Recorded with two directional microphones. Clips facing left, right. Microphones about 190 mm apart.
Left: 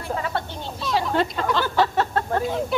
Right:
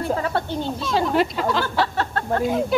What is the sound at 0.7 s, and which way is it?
Speech, centre (ahead or behind).